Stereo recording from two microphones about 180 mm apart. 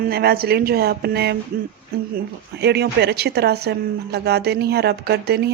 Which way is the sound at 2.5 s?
65° right (ahead or behind).